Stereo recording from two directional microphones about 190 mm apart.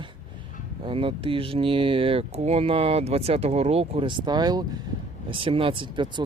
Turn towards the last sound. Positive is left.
turn(degrees=-25)  # may be behind; listen again after turning